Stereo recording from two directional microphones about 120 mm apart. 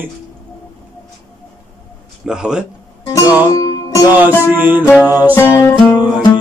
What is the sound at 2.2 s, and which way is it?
Music, 5° right (ahead or behind).